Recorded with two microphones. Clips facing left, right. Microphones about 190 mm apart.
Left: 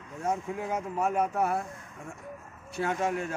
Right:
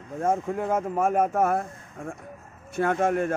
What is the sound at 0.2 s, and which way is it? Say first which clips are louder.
Speech: right 6 dB; 50° right (ahead or behind).